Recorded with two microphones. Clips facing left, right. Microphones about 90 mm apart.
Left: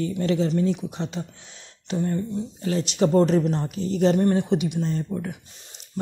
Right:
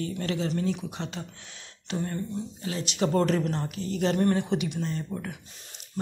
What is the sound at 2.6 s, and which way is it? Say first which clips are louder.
Speech: left 7 dB; 35° left (ahead or behind).